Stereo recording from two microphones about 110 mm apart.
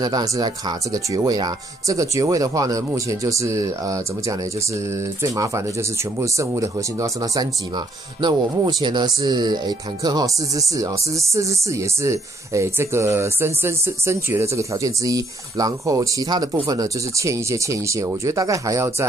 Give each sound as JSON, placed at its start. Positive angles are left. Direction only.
{"t": 0.0, "sound": "speech", "side_deg": -35}